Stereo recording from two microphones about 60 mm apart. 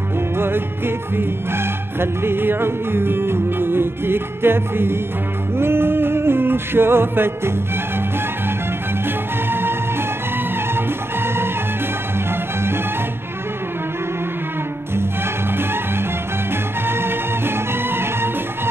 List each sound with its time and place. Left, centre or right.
0.4 s music: right
9.0 s music: right
11.2 s music: right
15.5 s music: right